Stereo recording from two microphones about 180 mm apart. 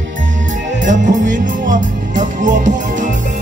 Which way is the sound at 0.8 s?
45° right (ahead or behind).